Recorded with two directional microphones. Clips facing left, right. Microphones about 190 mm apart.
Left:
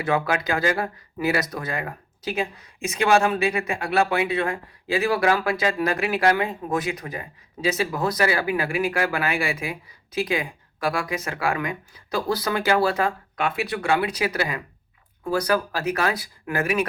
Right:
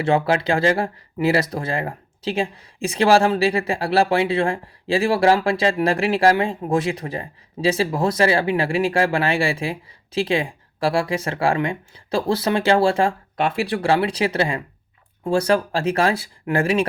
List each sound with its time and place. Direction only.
0.0 s speech: 30° right (ahead or behind)